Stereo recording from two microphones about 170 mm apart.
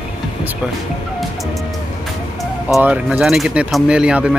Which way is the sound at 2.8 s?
10° right (ahead or behind).